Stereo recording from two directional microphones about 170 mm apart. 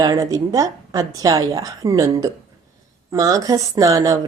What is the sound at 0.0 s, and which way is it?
Speech, 20° right (ahead or behind).